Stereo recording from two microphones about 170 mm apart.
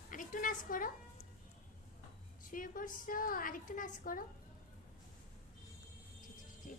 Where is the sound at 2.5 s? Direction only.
50° left (ahead or behind).